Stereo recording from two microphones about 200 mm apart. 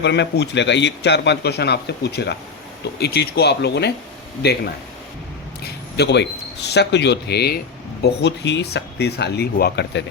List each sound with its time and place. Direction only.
0.0 s a man's voice: 60° left (ahead or behind)
5.6 s speech: 55° left (ahead or behind)